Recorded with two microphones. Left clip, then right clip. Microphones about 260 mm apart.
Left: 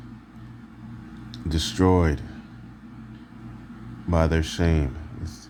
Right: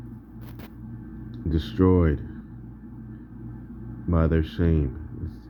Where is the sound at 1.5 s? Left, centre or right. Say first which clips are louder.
Left 1 dB; centre.